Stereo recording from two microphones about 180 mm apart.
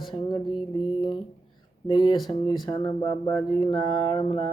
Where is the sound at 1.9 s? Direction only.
25° left (ahead or behind).